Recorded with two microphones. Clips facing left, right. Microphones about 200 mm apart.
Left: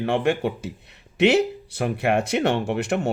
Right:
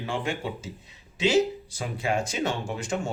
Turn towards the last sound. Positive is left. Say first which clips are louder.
# left 7 dB
turn(degrees=65)  # may be behind; listen again after turning